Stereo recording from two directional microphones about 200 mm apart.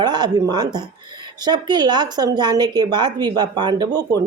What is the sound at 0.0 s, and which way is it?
A woman's voice, 20° right (ahead or behind).